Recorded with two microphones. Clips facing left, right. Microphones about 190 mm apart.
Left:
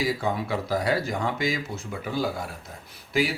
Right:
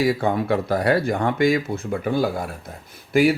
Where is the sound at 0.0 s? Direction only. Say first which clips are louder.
Right 6 dB; 60° right (ahead or behind).